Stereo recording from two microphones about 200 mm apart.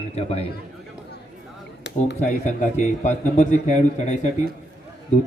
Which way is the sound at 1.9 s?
60° left (ahead or behind).